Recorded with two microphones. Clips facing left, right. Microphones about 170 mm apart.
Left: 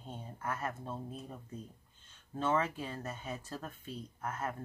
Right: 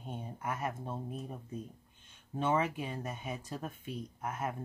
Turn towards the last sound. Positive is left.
turn(degrees=-15)  # may be behind; listen again after turning